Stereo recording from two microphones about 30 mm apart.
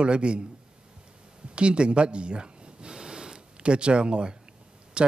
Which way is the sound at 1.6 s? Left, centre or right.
Right.